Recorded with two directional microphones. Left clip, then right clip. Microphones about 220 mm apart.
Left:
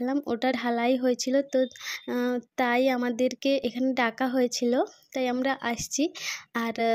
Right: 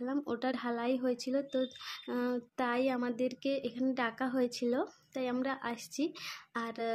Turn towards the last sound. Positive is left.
turn(degrees=35)  # may be behind; listen again after turning